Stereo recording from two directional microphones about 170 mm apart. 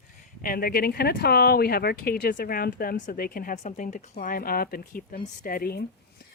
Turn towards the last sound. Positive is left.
turn(degrees=65)  # may be behind; listen again after turning